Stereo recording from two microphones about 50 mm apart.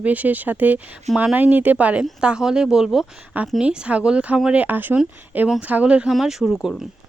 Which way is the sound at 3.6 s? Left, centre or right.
Right.